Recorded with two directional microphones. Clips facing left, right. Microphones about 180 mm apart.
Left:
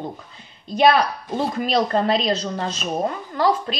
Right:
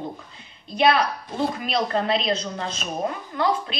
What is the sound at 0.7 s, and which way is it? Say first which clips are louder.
Speech: left 3 dB; 40° left (ahead or behind).